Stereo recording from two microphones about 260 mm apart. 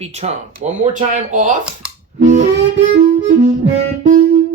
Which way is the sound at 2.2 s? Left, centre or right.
Right.